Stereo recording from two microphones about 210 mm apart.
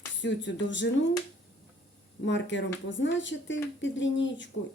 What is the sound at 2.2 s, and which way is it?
Speech, 60° left (ahead or behind).